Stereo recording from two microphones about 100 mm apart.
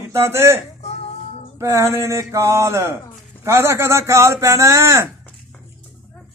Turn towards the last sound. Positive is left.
turn(degrees=-30)  # may be behind; listen again after turning